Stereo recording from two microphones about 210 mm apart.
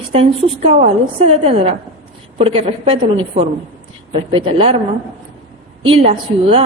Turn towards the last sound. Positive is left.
turn(degrees=-30)  # may be behind; listen again after turning